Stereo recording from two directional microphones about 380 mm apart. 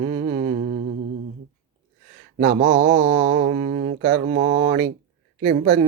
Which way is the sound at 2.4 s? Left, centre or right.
Right.